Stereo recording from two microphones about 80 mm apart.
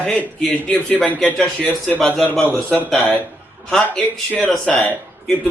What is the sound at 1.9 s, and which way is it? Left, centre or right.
A man's voice, centre.